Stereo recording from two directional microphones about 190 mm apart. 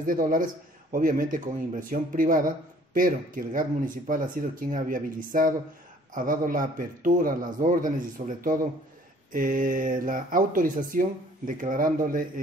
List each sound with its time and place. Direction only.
0.0 s a man's voice: 45° right (ahead or behind)